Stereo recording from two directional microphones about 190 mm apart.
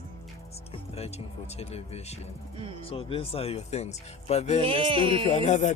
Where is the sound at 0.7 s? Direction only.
30° left (ahead or behind).